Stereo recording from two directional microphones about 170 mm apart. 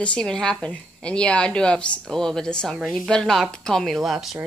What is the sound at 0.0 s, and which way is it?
A woman's voice, 5° left (ahead or behind).